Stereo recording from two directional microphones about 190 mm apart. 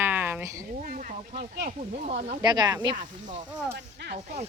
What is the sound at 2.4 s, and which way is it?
Speech, 20° right (ahead or behind).